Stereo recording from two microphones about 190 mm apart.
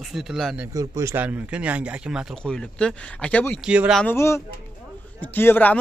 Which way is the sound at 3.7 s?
5° right (ahead or behind).